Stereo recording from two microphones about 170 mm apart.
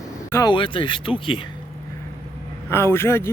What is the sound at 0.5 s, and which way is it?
Speech, 30° left (ahead or behind).